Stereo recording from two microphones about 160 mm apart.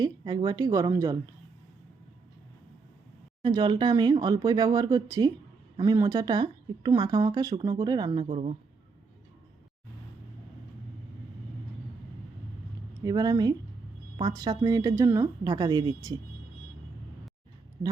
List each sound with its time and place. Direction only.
0.0 s speech: 25° right (ahead or behind)
3.4 s speech: 25° right (ahead or behind)
13.0 s speech: 20° right (ahead or behind)